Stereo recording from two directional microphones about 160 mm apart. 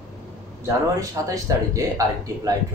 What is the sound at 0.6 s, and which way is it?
Speech, 20° right (ahead or behind).